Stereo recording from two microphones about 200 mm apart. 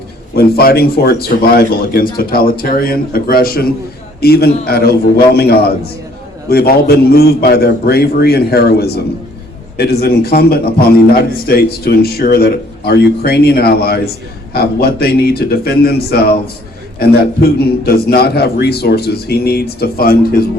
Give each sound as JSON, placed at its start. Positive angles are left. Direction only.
{"t": 0.3, "sound": "a man's voice", "side_deg": 50}